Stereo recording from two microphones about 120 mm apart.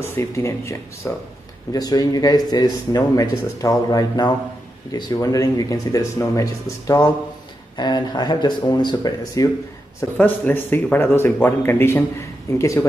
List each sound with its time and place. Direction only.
0.0 s speech: 20° left (ahead or behind)
10.1 s speech: 15° left (ahead or behind)